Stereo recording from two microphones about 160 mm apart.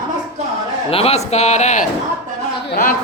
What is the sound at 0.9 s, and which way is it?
Speech, 40° left (ahead or behind).